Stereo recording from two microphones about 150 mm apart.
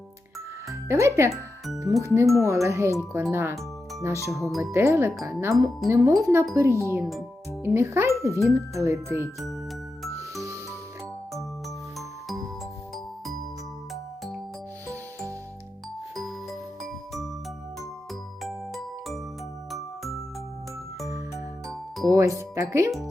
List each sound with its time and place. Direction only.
0.7 s speech: 20° right (ahead or behind)
1.3 s music: centre (ahead or behind)
2.0 s speech: 20° right (ahead or behind)
4.3 s speech: centre (ahead or behind)
4.6 s speech: 20° right (ahead or behind)
7.0 s speech: centre (ahead or behind)
7.6 s speech: 15° right (ahead or behind)
16.1 s music: centre (ahead or behind)
18.4 s music: centre (ahead or behind)
22.0 s music: 20° right (ahead or behind)